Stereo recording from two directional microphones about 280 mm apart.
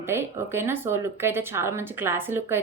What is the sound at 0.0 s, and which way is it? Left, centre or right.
Speech, centre.